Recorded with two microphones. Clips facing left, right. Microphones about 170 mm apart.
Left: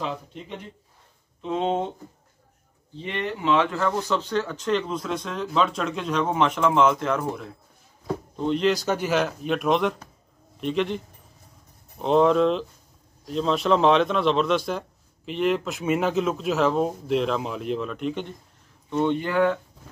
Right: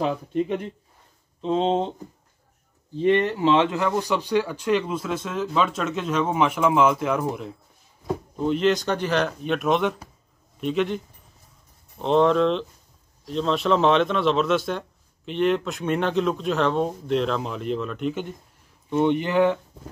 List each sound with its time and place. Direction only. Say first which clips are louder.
0.3 s speech: right 13 dB; 55° right (ahead or behind)
1.4 s speech: right 3 dB; 30° right (ahead or behind)
3.0 s speech: right 9 dB; 40° right (ahead or behind)
3.7 s speech: right 1 dB; 15° right (ahead or behind)
8.4 s a man's voice: right 1 dB; 5° right (ahead or behind)
12.0 s a man's voice: even; centre (ahead or behind)
18.9 s speech: right 2 dB; 15° right (ahead or behind)